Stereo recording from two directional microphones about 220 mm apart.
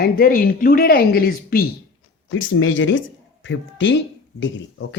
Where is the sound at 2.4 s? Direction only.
65° left (ahead or behind).